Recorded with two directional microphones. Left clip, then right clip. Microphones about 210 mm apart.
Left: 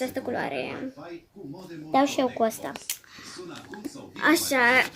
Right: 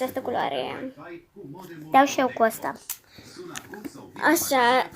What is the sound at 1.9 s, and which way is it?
Speech, centre (ahead or behind).